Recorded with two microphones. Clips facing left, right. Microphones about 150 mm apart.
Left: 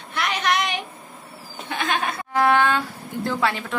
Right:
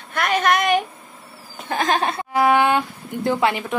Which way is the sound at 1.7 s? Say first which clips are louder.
Right 5 dB; 40° right (ahead or behind).